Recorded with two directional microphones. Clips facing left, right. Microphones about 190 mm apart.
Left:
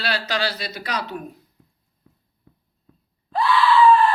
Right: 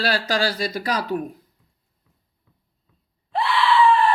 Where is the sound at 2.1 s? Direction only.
50° left (ahead or behind).